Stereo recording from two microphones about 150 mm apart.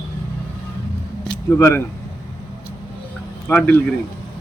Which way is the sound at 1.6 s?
15° left (ahead or behind).